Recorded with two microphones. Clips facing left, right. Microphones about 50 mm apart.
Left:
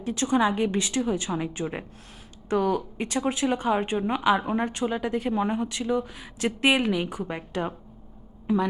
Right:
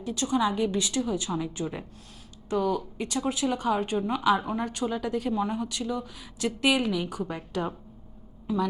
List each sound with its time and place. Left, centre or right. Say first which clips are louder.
0.0 s a woman's voice: left 3 dB; left